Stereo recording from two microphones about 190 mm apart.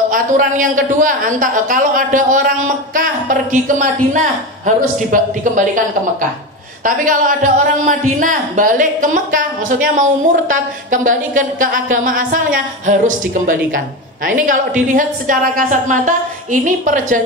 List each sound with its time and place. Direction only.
0.1 s a man's voice: 45° right (ahead or behind)
6.8 s a man's voice: 45° right (ahead or behind)